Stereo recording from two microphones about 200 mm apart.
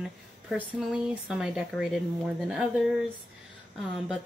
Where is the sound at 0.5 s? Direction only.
Centre (ahead or behind).